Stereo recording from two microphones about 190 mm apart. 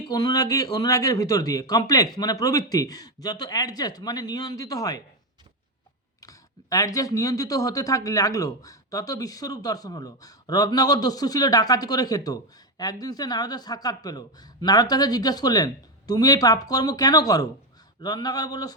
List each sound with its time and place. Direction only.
0.1 s speech: 20° left (ahead or behind)
6.1 s speech: 20° left (ahead or behind)